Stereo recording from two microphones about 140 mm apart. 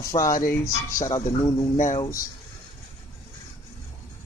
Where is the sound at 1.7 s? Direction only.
65° left (ahead or behind).